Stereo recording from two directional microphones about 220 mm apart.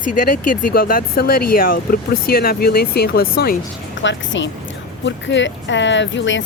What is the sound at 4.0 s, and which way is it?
Speech, 55° left (ahead or behind).